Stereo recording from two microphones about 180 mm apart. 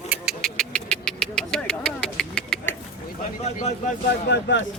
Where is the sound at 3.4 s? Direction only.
40° left (ahead or behind).